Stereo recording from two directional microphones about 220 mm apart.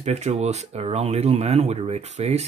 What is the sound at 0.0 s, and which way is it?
Speech, 30° right (ahead or behind).